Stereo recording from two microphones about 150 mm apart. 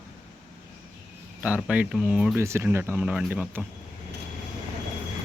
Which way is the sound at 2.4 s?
20° right (ahead or behind).